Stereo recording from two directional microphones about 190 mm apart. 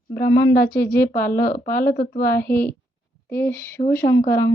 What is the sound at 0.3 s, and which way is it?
Speech, 20° left (ahead or behind).